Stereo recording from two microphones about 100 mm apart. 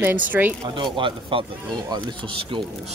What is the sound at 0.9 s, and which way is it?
Speech, 55° right (ahead or behind).